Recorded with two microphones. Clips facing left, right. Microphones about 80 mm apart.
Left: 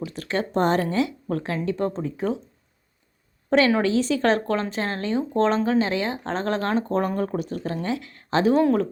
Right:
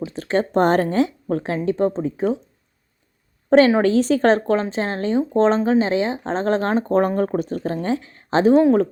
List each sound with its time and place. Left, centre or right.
0.0 s a sound: right
0.6 s speech: right
0.9 s speech: right
3.8 s a woman's voice: right